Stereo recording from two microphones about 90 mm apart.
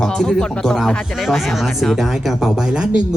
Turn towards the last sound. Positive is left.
turn(degrees=-10)  # may be behind; listen again after turning